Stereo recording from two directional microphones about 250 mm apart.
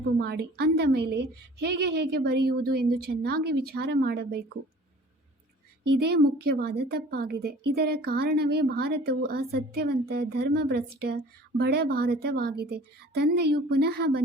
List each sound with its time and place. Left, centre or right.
0.2 s a woman's voice: right
6.0 s a woman's voice: right